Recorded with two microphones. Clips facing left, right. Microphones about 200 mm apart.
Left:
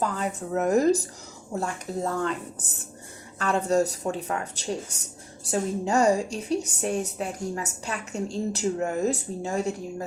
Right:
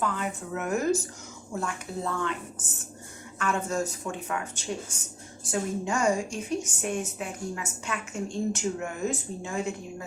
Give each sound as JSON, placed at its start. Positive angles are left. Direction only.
{"t": 0.0, "sound": "a woman's voice", "side_deg": 35}